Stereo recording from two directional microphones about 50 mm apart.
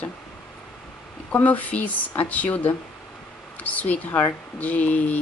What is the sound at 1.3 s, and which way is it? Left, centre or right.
Speech, left.